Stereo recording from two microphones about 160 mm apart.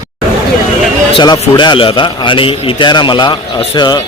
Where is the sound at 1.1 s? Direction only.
25° left (ahead or behind).